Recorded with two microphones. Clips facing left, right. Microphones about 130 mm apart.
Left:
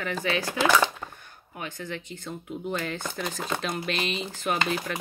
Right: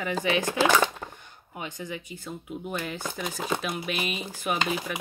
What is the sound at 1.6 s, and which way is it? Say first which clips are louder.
Speech: even; 15° right (ahead or behind).